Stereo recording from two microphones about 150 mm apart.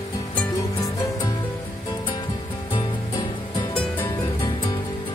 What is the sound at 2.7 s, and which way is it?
Music, 30° left (ahead or behind).